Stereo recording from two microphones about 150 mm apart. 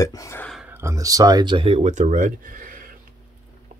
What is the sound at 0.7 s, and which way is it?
Speech, 15° right (ahead or behind).